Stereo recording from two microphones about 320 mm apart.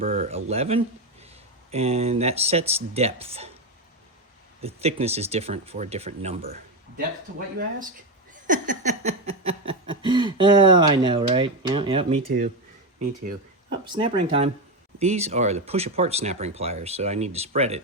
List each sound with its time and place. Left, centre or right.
0.0 s speech: right
4.6 s speech: centre
8.3 s a sound: right
13.9 s speech: centre